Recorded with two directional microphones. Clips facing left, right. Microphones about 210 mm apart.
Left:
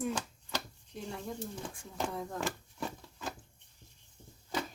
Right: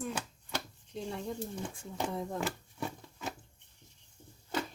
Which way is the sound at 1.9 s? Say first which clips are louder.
Right 1 dB; 15° right (ahead or behind).